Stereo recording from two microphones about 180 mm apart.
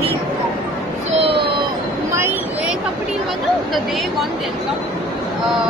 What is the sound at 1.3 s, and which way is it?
Baby cry, 25° right (ahead or behind).